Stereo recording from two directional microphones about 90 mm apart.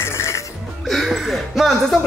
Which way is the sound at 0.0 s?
30° left (ahead or behind).